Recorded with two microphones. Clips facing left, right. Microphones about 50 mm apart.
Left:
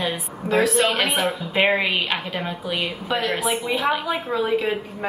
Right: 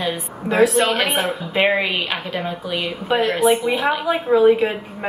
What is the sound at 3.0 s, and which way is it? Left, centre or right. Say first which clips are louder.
A woman's voice: right 8 dB; centre.